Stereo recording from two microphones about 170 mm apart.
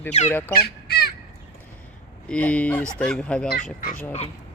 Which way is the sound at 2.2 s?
10° left (ahead or behind).